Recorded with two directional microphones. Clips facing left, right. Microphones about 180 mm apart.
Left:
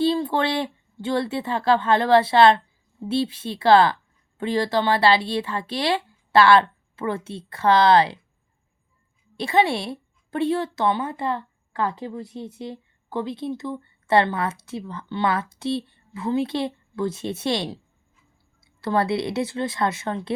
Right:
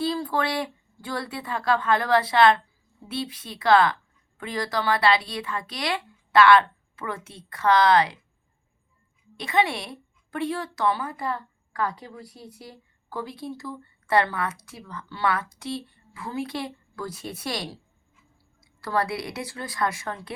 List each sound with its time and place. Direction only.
0.0 s a woman's voice: 25° left (ahead or behind)
9.4 s a woman's voice: 30° left (ahead or behind)